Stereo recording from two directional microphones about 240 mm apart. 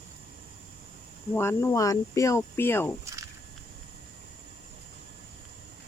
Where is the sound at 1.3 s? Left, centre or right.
Centre.